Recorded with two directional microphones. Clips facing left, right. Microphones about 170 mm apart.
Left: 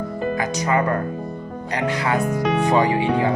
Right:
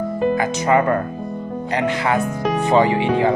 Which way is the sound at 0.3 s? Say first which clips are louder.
Right 4 dB; 25° right (ahead or behind).